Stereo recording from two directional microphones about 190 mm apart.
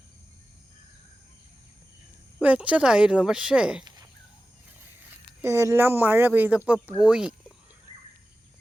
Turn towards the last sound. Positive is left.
turn(degrees=-5)  # may be behind; listen again after turning